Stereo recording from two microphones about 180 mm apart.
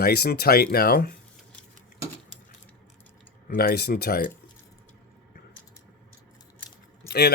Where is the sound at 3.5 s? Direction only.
60° left (ahead or behind).